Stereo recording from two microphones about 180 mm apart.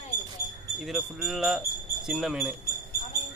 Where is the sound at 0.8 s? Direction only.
Centre (ahead or behind).